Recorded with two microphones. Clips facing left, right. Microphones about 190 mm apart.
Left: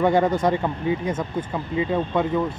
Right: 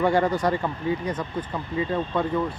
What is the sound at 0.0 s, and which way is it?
Speech, 20° left (ahead or behind).